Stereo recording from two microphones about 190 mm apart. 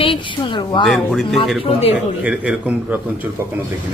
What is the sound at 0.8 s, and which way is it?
Speech, centre (ahead or behind).